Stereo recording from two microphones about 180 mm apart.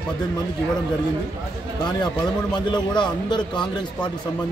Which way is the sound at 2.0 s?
25° left (ahead or behind).